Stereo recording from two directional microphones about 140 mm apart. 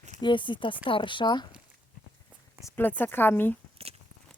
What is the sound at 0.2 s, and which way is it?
A woman's voice, 35° left (ahead or behind).